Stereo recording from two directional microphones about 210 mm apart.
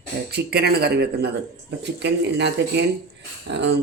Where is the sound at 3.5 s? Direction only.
55° right (ahead or behind).